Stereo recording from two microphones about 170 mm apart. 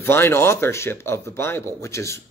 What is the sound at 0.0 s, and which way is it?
Speech, 15° left (ahead or behind).